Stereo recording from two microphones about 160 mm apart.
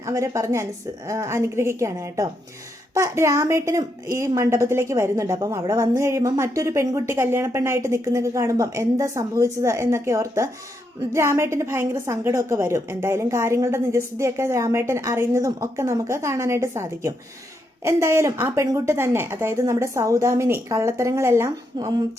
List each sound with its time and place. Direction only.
0.0 s a woman's voice: 20° right (ahead or behind)